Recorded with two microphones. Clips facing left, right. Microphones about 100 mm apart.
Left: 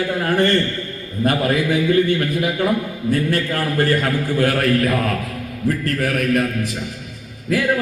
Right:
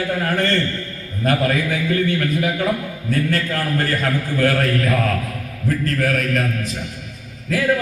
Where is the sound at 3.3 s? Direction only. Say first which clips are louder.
Left 1 dB; 20° left (ahead or behind).